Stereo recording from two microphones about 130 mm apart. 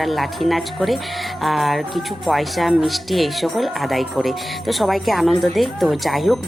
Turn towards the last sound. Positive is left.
turn(degrees=0)  # may be behind; listen again after turning